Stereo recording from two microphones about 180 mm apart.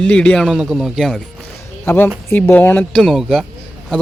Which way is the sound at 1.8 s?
10° left (ahead or behind).